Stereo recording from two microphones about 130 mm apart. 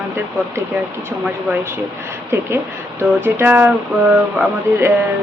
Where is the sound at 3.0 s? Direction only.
20° right (ahead or behind).